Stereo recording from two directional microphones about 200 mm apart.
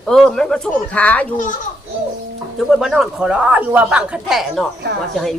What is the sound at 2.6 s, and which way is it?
Speech, centre (ahead or behind).